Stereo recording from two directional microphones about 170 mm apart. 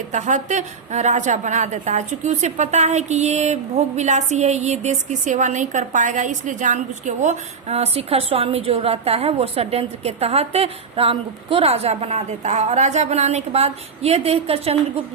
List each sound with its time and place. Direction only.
0.1 s a woman's voice: 45° right (ahead or behind)